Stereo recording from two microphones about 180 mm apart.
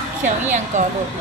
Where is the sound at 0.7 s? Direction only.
40° right (ahead or behind).